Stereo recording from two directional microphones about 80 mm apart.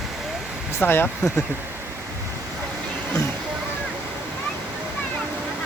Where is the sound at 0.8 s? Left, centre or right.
Left.